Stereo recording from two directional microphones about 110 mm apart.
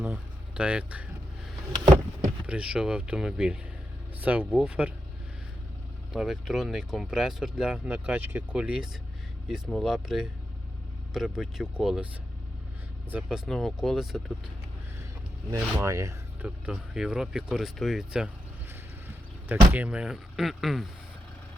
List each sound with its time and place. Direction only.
0.0 s speech: 10° right (ahead or behind)
2.5 s speech: 5° right (ahead or behind)
6.1 s speech: 5° right (ahead or behind)
13.1 s speech: 10° right (ahead or behind)
15.4 s speech: 30° right (ahead or behind)
16.4 s speech: 10° right (ahead or behind)
18.7 s speech: 20° right (ahead or behind); by 20.8 s centre (ahead or behind)